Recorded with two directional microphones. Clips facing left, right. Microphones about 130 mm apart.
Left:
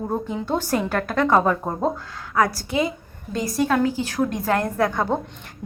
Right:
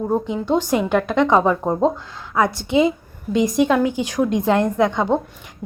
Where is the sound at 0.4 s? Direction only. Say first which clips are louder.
Right 3 dB; 15° right (ahead or behind).